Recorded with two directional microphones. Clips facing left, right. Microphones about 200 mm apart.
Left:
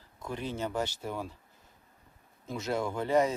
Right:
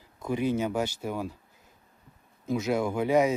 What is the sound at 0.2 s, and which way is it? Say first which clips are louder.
Speech: right 8 dB; 10° right (ahead or behind).